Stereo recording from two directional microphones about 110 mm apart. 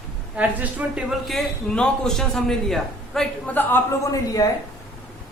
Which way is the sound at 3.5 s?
20° left (ahead or behind).